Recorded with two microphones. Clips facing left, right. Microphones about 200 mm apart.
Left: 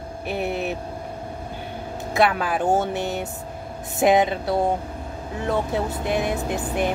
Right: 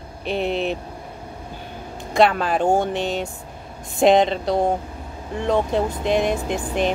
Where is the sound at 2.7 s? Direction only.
5° left (ahead or behind).